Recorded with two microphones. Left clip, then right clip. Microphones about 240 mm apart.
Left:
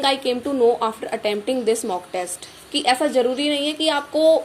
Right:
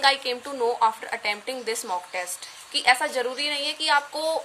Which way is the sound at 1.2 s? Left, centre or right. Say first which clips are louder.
Left 7 dB; right.